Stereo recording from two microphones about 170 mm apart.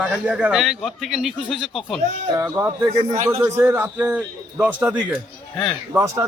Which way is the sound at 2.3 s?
15° right (ahead or behind).